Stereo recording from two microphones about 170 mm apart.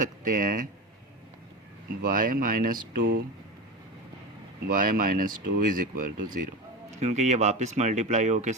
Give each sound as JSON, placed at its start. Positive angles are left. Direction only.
{"t": 0.0, "sound": "speech", "side_deg": -55}
{"t": 1.9, "sound": "speech", "side_deg": -55}
{"t": 4.7, "sound": "speech", "side_deg": -55}
{"t": 7.0, "sound": "speech", "side_deg": -45}